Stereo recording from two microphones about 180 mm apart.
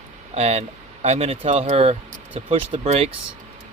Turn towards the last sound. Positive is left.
turn(degrees=-35)  # may be behind; listen again after turning